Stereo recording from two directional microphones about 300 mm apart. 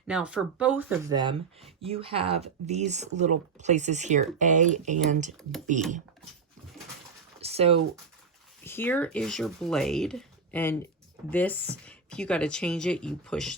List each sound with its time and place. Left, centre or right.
0.1 s speech: centre; by 5.3 s right
5.4 s speech: centre
7.4 s a sound: centre
8.6 s speech: centre